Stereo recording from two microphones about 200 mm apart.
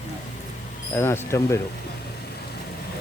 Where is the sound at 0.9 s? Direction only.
10° left (ahead or behind).